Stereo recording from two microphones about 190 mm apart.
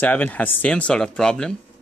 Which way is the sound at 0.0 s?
10° left (ahead or behind).